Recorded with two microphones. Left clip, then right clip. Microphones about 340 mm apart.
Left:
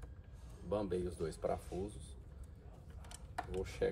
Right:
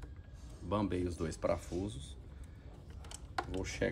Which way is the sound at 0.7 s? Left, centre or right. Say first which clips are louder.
Right 2 dB; right.